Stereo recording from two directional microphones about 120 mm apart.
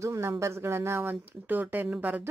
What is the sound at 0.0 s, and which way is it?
Speech, 25° right (ahead or behind).